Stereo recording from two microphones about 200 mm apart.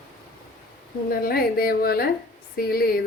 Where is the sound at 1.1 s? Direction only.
50° left (ahead or behind).